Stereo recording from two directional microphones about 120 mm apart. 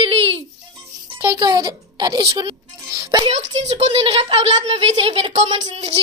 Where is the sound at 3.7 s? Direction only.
55° right (ahead or behind).